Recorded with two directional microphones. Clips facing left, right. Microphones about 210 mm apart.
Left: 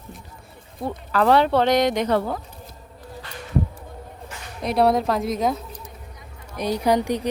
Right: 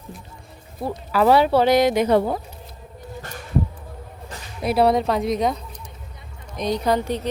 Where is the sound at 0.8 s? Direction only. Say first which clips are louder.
Right 2 dB; 5° right (ahead or behind).